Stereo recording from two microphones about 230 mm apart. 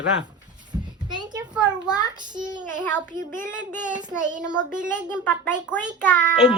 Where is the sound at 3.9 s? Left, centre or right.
Centre.